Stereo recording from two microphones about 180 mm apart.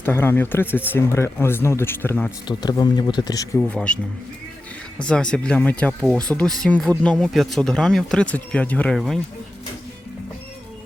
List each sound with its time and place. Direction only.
0.0 s speech: 10° left (ahead or behind)
2.5 s speech: 20° left (ahead or behind)
3.6 s speech: 5° left (ahead or behind)